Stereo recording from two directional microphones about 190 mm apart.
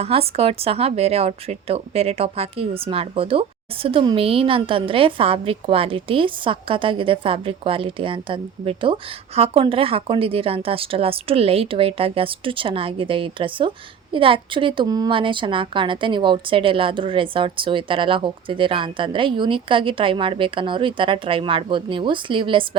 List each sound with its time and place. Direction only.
0.0 s a woman's voice: 30° right (ahead or behind)